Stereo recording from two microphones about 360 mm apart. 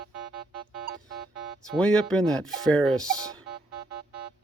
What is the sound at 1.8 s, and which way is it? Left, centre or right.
Speech, centre.